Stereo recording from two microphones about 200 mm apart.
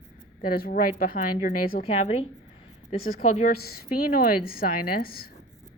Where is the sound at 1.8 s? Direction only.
30° left (ahead or behind).